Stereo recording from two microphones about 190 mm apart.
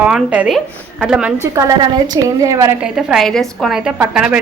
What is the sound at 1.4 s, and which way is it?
A woman's voice, 15° right (ahead or behind).